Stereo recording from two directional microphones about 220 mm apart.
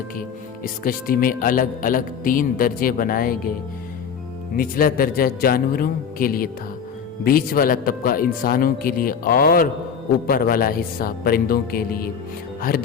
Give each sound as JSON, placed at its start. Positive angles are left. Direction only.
{"t": 0.2, "sound": "a man's voice", "side_deg": 40}
{"t": 4.5, "sound": "a man's voice", "side_deg": 40}